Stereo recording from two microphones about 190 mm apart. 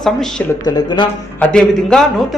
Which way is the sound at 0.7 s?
20° left (ahead or behind).